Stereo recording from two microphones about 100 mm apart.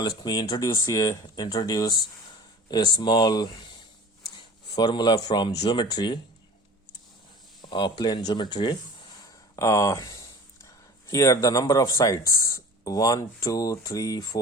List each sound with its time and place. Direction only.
0.0 s speech: 50° left (ahead or behind)
7.7 s speech: 50° left (ahead or behind)
9.6 s speech: 30° left (ahead or behind)